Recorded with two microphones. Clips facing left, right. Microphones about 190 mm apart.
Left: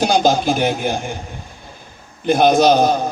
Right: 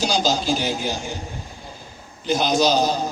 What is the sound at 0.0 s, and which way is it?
A man's voice, 55° left (ahead or behind).